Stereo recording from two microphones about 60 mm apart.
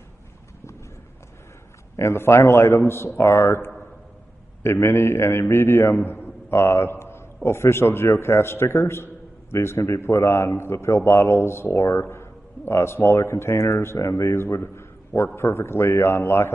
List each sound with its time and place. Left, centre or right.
2.0 s a man's voice: left